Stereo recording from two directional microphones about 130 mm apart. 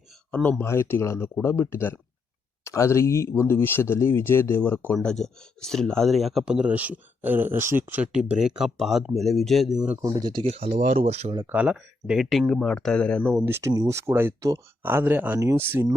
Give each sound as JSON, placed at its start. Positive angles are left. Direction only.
{"t": 0.3, "sound": "speech", "side_deg": 10}
{"t": 4.9, "sound": "speech", "side_deg": 0}
{"t": 10.1, "sound": "speech", "side_deg": -35}
{"t": 10.4, "sound": "speech", "side_deg": -50}
{"t": 11.4, "sound": "speech", "side_deg": -10}
{"t": 13.4, "sound": "speech", "side_deg": -20}